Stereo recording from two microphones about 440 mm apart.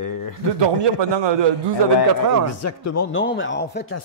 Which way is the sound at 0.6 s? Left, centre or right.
Right.